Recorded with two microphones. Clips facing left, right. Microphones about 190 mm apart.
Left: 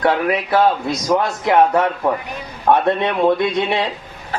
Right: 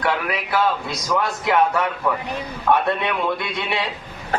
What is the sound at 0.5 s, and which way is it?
Speech, 40° left (ahead or behind).